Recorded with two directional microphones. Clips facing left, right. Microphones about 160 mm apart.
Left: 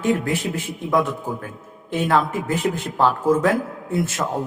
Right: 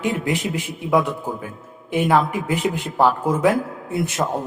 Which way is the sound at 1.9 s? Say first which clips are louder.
Right 2 dB; 15° right (ahead or behind).